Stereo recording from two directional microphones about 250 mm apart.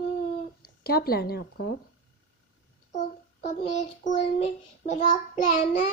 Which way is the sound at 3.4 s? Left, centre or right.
Left.